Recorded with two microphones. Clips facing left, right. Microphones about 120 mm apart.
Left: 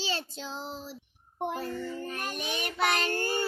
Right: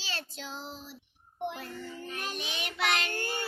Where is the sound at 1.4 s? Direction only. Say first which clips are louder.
Left 4 dB; 40° left (ahead or behind).